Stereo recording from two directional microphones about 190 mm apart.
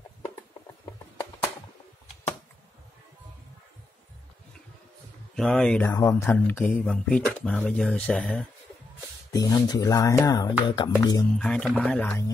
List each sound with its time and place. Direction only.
5.3 s speech: 5° left (ahead or behind)
5.9 s speech: 15° left (ahead or behind)
9.3 s speech: 20° left (ahead or behind)
11.3 s speech: 5° left (ahead or behind)